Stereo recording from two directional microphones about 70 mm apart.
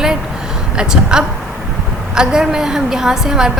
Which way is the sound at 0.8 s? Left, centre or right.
Centre.